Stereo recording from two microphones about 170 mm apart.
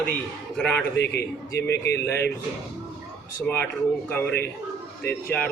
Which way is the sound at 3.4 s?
10° left (ahead or behind).